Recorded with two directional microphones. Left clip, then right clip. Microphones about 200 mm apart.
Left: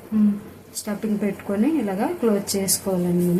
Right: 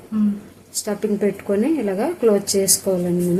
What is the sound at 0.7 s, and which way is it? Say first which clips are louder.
Speech: right 5 dB; 45° right (ahead or behind).